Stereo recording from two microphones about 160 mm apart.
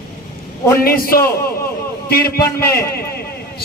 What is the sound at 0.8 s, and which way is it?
A man's voice, 65° left (ahead or behind).